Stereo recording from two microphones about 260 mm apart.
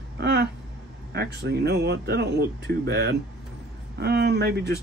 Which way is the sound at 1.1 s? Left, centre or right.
Right.